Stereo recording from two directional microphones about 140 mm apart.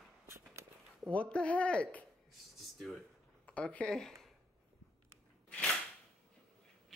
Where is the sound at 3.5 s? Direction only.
10° left (ahead or behind).